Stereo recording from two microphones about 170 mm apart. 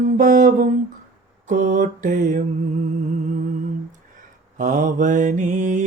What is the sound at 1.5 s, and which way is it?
Mantra, 50° right (ahead or behind).